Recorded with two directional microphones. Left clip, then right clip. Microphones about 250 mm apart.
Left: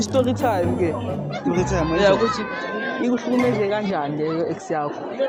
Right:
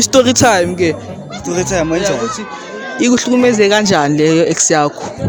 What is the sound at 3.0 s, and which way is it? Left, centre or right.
Speech, right.